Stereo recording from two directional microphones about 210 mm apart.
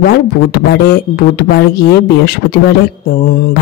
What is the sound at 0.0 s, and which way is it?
Speech, 45° left (ahead or behind).